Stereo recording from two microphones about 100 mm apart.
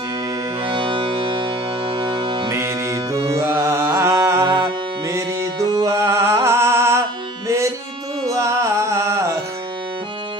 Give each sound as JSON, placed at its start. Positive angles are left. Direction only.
{"t": 0.6, "sound": "music", "side_deg": -60}
{"t": 2.5, "sound": "music", "side_deg": -30}
{"t": 4.4, "sound": "music", "side_deg": -55}
{"t": 5.0, "sound": "music", "side_deg": -30}